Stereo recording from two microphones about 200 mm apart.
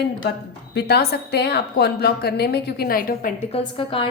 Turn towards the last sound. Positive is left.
turn(degrees=25)  # may be behind; listen again after turning